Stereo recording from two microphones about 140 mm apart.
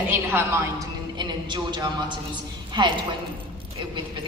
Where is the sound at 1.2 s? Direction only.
35° right (ahead or behind).